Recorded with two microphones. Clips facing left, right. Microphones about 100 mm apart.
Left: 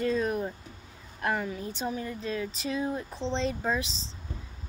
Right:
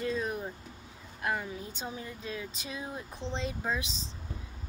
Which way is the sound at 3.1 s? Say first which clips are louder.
Left 6 dB; 20° left (ahead or behind).